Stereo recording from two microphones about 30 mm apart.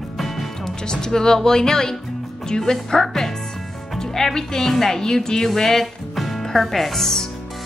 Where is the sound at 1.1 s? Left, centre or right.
Centre.